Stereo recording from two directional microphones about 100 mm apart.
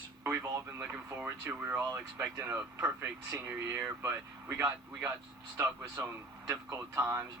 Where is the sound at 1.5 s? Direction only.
15° right (ahead or behind).